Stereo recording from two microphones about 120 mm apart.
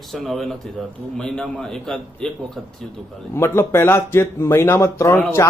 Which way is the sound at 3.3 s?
20° left (ahead or behind).